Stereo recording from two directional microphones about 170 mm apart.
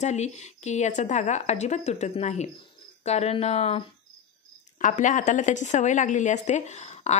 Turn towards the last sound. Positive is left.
turn(degrees=45)  # may be behind; listen again after turning